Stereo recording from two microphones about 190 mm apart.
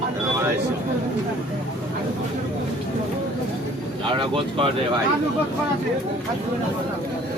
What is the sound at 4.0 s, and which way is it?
Speech, 25° right (ahead or behind).